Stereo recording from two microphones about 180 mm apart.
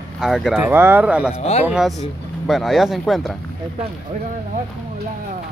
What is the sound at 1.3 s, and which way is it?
Speech, 35° left (ahead or behind).